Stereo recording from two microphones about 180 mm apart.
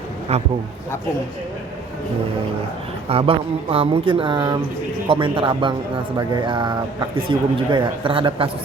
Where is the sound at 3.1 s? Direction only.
30° right (ahead or behind).